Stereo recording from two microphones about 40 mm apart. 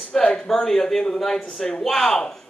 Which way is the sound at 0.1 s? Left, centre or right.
Left.